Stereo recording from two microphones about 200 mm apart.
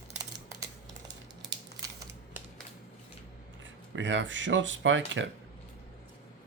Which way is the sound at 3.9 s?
65° right (ahead or behind).